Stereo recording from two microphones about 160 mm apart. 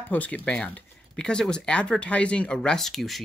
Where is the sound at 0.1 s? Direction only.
10° left (ahead or behind).